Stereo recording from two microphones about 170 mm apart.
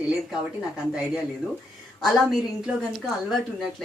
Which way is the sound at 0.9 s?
5° right (ahead or behind).